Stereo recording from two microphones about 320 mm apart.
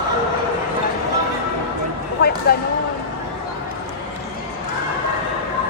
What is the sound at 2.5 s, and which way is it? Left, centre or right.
Speech, left.